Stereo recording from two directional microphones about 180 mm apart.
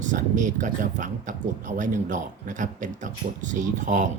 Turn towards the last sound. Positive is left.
turn(degrees=-45)  # may be behind; listen again after turning